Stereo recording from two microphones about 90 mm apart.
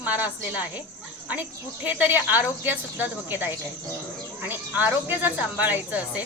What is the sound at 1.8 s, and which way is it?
Speech, 20° right (ahead or behind).